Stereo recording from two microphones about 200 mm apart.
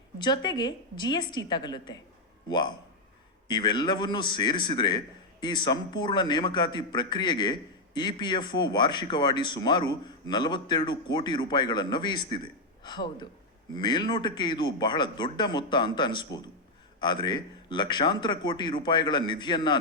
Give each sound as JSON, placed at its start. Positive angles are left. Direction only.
{"t": 0.2, "sound": "speech", "side_deg": 20}